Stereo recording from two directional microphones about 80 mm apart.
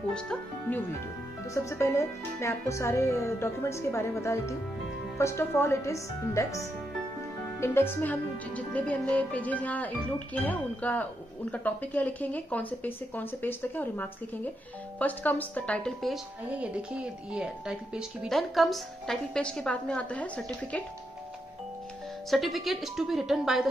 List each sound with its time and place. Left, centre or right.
0.7 s speech: left
1.5 s speech: left
7.4 s speech: left
16.5 s speech: centre
18.3 s a woman's voice: centre
22.3 s a woman's voice: centre